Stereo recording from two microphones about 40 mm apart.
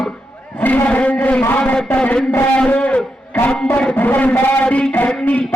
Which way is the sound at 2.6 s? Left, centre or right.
Left.